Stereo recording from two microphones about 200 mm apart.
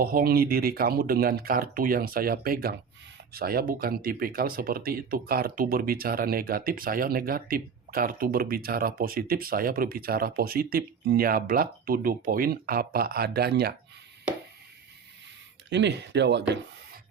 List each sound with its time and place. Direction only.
0.0 s speech: 45° right (ahead or behind)
15.7 s speech: 60° right (ahead or behind)